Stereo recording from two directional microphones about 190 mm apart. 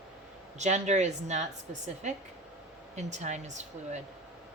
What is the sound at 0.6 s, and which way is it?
Speech, 35° right (ahead or behind).